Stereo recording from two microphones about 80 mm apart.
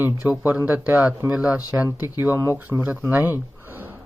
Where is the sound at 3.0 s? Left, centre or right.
Right.